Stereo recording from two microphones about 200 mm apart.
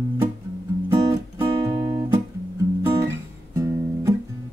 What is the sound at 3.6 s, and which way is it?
Guitar, 15° right (ahead or behind).